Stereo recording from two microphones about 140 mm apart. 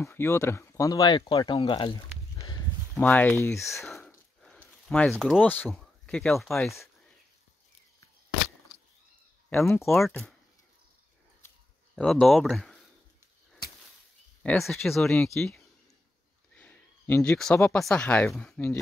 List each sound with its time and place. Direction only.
0.0 s speech: 20° left (ahead or behind)
3.0 s speech: 10° left (ahead or behind)
3.8 s a sound: centre (ahead or behind)
5.4 s speech: 15° left (ahead or behind)
9.5 s speech: 20° left (ahead or behind)
9.9 s speech: 5° left (ahead or behind)
12.0 s speech: 5° left (ahead or behind)
14.4 s speech: 5° left (ahead or behind)
16.5 s a sound: 10° left (ahead or behind)
17.7 s speech: 5° left (ahead or behind)